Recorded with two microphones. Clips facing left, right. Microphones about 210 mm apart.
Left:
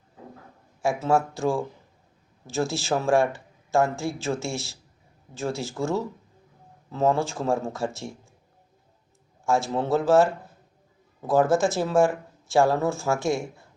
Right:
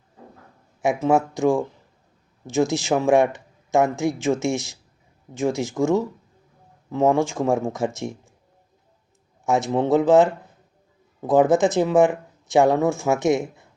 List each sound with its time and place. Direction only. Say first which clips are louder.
0.8 s speech: right 4 dB; 15° right (ahead or behind)
9.5 s speech: right 4 dB; 20° right (ahead or behind)
11.3 s speech: right 4 dB; 20° right (ahead or behind)